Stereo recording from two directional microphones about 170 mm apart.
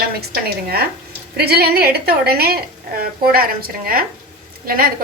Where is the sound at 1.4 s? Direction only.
65° right (ahead or behind).